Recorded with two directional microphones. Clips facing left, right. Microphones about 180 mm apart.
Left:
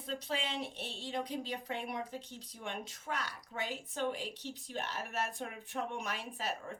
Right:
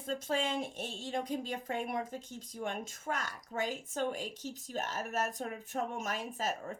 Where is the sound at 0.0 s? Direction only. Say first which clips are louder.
Right 5 dB; 45° right (ahead or behind).